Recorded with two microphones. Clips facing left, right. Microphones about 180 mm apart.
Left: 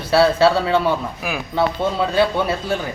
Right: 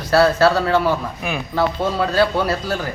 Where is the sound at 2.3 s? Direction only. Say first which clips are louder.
Right 1 dB; centre (ahead or behind).